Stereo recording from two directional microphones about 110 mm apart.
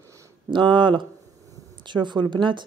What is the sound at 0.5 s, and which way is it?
Speech, 50° right (ahead or behind).